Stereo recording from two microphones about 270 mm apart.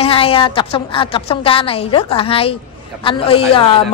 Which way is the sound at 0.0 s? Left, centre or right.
Left.